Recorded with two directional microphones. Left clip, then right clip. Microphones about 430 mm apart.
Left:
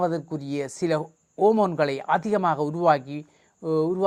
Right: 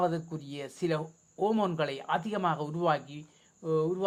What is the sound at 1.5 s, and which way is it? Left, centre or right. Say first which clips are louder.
Speech: left 9 dB; left.